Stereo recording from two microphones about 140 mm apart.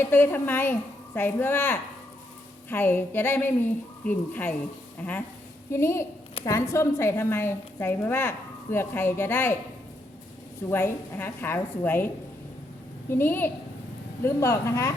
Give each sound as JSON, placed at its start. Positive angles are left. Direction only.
{"t": 0.0, "sound": "a woman's voice", "side_deg": 15}
{"t": 5.7, "sound": "a woman's voice", "side_deg": 20}
{"t": 10.7, "sound": "a woman's voice", "side_deg": 15}